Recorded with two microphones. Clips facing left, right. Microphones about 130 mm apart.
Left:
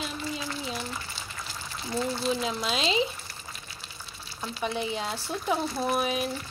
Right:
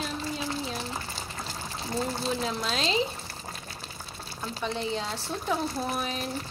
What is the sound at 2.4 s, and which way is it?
Speech, 10° left (ahead or behind).